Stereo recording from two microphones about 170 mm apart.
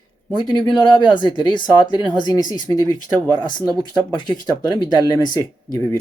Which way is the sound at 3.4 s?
25° left (ahead or behind).